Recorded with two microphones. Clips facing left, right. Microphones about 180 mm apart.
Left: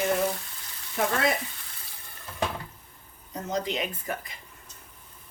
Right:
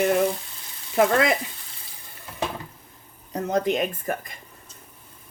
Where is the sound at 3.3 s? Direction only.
55° right (ahead or behind).